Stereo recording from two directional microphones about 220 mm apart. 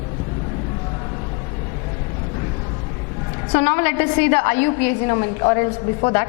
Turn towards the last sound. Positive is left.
turn(degrees=15)  # may be behind; listen again after turning